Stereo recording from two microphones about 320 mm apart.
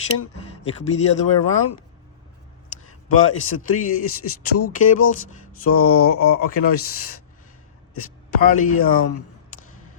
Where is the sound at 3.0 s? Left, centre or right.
Left.